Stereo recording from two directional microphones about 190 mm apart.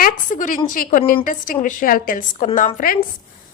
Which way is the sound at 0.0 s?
45° left (ahead or behind).